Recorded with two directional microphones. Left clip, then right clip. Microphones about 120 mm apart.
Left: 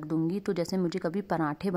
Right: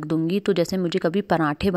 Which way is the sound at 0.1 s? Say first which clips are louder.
Right 8 dB; 30° right (ahead or behind).